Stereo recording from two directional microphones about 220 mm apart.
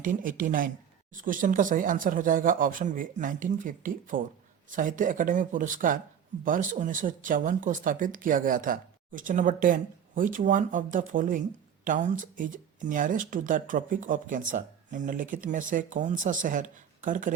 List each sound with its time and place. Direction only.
0.0 s speech: 35° right (ahead or behind)